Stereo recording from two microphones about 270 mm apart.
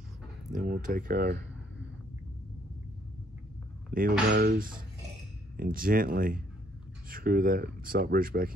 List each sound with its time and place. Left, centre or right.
0.5 s speech: right
3.9 s dishes: right
4.3 s speech: right